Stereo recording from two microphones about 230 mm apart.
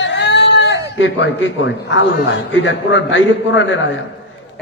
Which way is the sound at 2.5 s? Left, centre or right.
Left.